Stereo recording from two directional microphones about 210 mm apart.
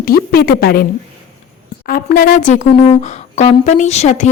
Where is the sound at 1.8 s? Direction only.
45° left (ahead or behind).